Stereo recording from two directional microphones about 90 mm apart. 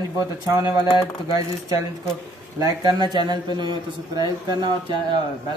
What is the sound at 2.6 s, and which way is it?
Speech, 55° right (ahead or behind).